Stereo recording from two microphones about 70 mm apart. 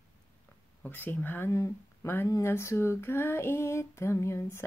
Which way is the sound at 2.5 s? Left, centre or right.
Left.